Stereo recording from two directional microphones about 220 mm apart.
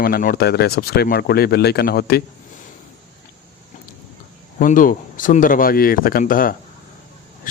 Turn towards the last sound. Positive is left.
turn(degrees=35)  # may be behind; listen again after turning